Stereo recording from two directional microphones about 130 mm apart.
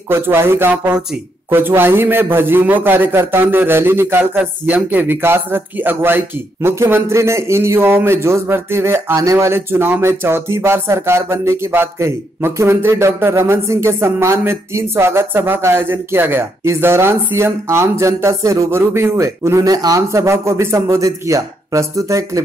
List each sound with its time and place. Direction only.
0.1 s a man's voice: 20° right (ahead or behind)